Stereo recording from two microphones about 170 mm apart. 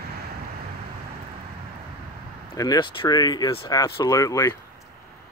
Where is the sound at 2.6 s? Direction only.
25° left (ahead or behind).